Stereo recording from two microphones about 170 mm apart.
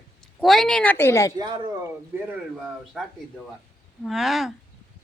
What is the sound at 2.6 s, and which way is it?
Speech, centre (ahead or behind).